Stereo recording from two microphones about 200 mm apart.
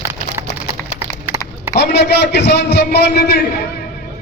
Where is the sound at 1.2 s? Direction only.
10° right (ahead or behind).